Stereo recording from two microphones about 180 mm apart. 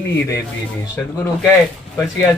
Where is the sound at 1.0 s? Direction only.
5° left (ahead or behind).